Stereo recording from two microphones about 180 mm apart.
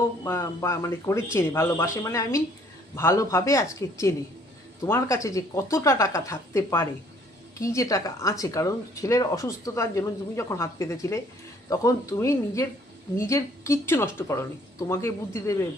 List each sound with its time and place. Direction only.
0.3 s speech: 15° left (ahead or behind)